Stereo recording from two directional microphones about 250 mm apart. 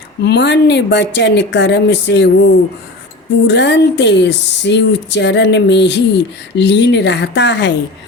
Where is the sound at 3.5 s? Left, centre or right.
Left.